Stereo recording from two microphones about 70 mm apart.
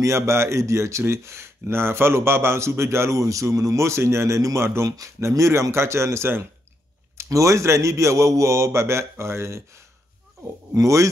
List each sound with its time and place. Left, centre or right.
0.0 s speech: right
7.2 s a man's voice: right
10.7 s a man's voice: right